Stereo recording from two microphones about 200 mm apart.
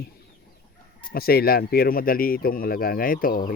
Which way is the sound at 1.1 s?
50° left (ahead or behind).